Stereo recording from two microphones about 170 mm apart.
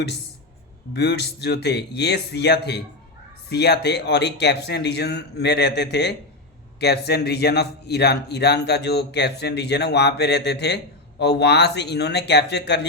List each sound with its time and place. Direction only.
0.9 s a man's voice: 85° left